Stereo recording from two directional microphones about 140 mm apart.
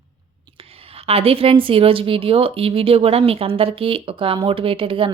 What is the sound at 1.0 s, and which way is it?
A woman's voice, 45° right (ahead or behind).